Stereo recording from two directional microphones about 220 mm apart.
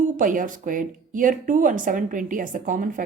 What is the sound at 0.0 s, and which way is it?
Speech, 40° right (ahead or behind).